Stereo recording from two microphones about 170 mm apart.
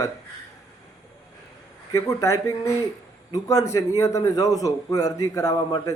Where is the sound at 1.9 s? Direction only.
20° left (ahead or behind).